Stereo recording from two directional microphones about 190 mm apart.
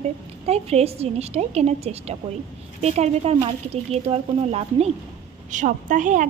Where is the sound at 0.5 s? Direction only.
35° right (ahead or behind).